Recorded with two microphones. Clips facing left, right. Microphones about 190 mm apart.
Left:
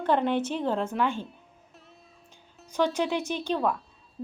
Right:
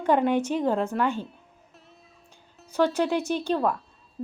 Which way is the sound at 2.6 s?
10° right (ahead or behind).